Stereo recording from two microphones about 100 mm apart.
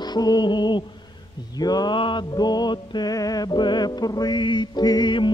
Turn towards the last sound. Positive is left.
turn(degrees=50)  # may be behind; listen again after turning